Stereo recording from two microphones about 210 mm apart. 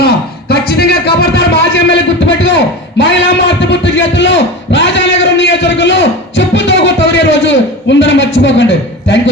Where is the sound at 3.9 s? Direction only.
60° left (ahead or behind).